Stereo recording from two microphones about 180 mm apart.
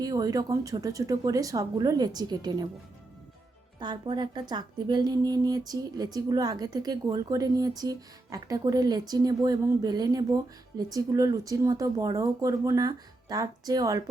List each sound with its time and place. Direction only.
0.0 s speech: 20° right (ahead or behind)
3.8 s speech: 25° right (ahead or behind)